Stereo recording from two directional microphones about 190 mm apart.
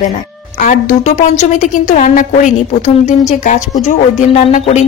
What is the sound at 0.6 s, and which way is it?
Speech, 40° left (ahead or behind).